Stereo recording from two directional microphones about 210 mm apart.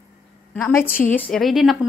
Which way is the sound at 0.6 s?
10° left (ahead or behind).